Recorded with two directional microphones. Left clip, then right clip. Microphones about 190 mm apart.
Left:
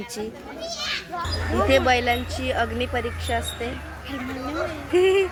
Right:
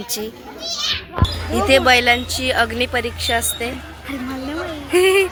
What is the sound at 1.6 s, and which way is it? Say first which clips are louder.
A woman's voice: right 7 dB; 15° right (ahead or behind).